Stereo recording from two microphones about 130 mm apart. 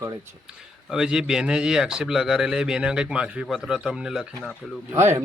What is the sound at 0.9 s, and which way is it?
A man's voice, 5° right (ahead or behind).